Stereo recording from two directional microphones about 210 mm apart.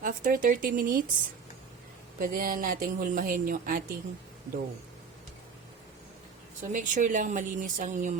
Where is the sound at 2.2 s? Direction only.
40° right (ahead or behind).